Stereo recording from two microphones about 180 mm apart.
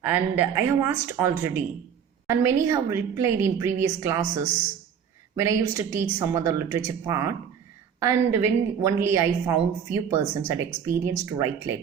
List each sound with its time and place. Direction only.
0.0 s a woman's voice: 15° right (ahead or behind)
5.4 s a woman's voice: 15° right (ahead or behind)